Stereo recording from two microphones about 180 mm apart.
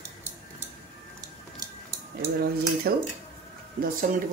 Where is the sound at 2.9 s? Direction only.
60° right (ahead or behind).